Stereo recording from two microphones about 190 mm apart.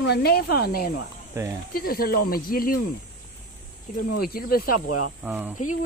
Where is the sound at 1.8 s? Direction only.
50° left (ahead or behind).